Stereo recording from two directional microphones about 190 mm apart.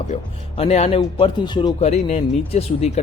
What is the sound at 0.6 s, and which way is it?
Speech, 35° left (ahead or behind).